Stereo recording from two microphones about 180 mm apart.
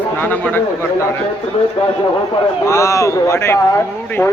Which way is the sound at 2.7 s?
15° left (ahead or behind).